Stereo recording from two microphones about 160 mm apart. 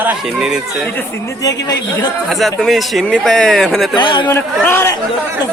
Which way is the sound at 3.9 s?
30° left (ahead or behind).